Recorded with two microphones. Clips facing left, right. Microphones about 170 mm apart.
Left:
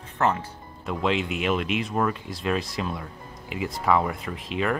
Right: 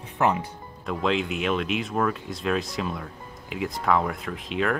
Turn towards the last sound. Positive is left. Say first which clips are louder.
# even
turn(degrees=0)  # may be behind; listen again after turning